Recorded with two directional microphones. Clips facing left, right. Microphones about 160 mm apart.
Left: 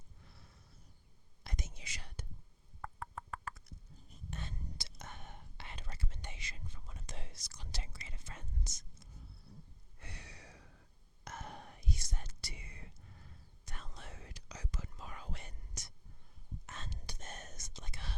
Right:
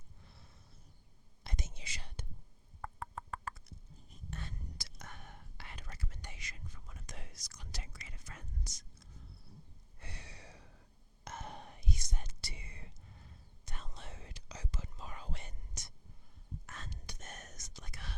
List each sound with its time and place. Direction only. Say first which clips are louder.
1.5 s whispering: right 1 dB; 25° right (ahead or behind)
2.8 s a sound: right 1 dB; 30° right (ahead or behind)
4.3 s whispering: left 1 dB; 20° left (ahead or behind)
10.0 s a sound: right 1 dB; 30° right (ahead or behind)
11.3 s whispering: right 1 dB; 20° right (ahead or behind)
12.4 s whispering: even; 30° right (ahead or behind)
16.6 s whispering: left 1 dB; 25° left (ahead or behind)